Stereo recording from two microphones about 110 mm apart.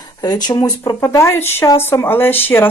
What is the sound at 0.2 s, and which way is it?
A woman's voice, 35° left (ahead or behind).